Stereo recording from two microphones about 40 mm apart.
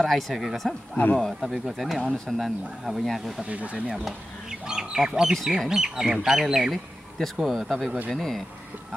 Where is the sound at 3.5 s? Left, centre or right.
Right.